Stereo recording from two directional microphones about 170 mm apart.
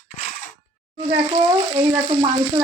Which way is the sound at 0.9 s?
35° right (ahead or behind).